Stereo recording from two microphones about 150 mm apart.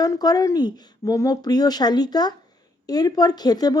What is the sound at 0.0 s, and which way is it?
Speech, 25° left (ahead or behind).